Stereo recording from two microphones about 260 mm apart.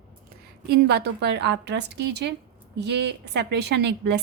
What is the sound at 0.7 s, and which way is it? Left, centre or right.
A woman's voice, right.